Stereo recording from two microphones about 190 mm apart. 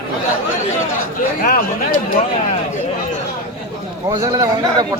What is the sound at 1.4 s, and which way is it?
Speech, 45° left (ahead or behind).